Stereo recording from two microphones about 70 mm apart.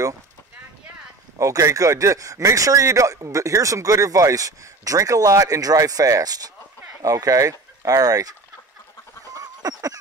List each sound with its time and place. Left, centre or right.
1.4 s speech: right
9.3 s fowl: right